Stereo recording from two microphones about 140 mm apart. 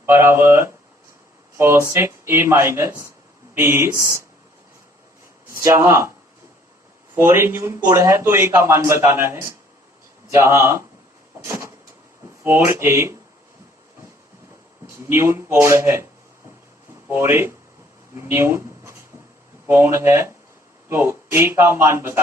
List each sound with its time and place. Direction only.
0.0 s a man's voice: 15° right (ahead or behind)
5.6 s speech: 20° right (ahead or behind)
7.2 s a man's voice: 15° right (ahead or behind)
15.0 s speech: 20° right (ahead or behind)
17.1 s a man's voice: 15° right (ahead or behind)